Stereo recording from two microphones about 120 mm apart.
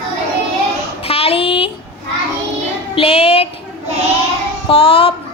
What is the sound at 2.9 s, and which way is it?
Child singing, 55° left (ahead or behind).